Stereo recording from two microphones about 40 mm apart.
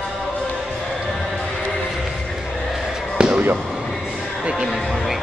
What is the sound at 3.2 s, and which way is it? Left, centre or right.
Basketball bounce, right.